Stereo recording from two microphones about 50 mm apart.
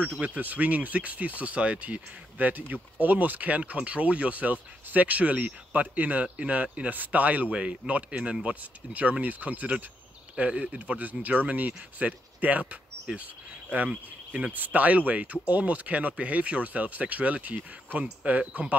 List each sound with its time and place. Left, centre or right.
0.0 s speech: right
10.3 s speech: right
11.0 s speech: right
14.5 s speech: right